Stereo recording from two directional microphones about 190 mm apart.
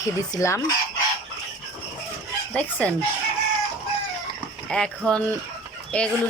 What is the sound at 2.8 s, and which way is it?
Speech, 5° left (ahead or behind).